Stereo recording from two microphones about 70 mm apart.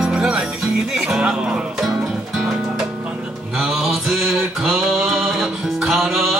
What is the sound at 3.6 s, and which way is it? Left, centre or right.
Mantra, centre.